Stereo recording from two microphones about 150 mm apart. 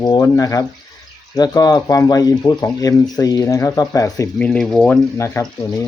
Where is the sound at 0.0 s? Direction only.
25° left (ahead or behind).